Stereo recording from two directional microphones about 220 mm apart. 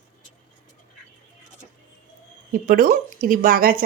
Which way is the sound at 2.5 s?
40° right (ahead or behind).